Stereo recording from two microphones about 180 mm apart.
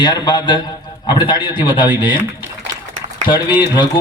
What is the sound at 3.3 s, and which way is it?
Speech, 25° left (ahead or behind).